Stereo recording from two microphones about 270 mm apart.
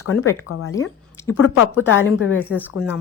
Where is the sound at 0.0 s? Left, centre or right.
Left.